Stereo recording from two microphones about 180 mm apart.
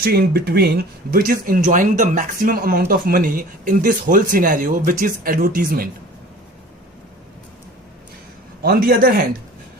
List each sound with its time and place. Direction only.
0.0 s speech: 55° right (ahead or behind)
8.6 s a man's voice: 55° right (ahead or behind)